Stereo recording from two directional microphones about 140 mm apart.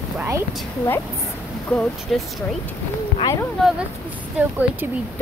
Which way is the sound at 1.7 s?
Centre (ahead or behind).